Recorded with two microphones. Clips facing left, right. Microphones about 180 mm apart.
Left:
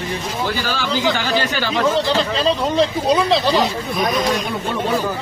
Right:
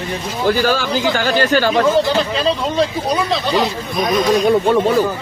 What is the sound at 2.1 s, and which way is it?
Speech, 5° right (ahead or behind).